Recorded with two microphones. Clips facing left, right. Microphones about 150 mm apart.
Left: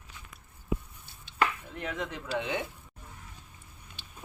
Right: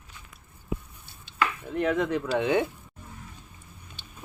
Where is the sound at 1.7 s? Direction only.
60° right (ahead or behind).